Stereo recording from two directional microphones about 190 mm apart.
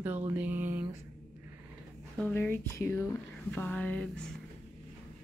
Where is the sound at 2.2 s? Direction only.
10° left (ahead or behind).